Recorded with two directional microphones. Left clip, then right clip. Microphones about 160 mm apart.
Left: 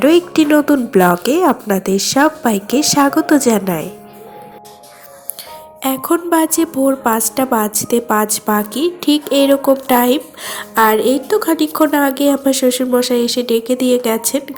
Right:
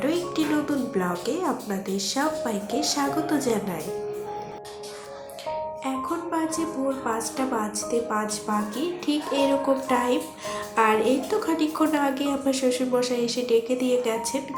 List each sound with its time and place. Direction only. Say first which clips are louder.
0.0 s a woman's voice: left 14 dB; 50° left (ahead or behind)
5.8 s a woman's voice: left 12 dB; 60° left (ahead or behind)